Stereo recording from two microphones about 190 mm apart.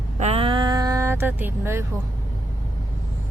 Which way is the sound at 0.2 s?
35° right (ahead or behind).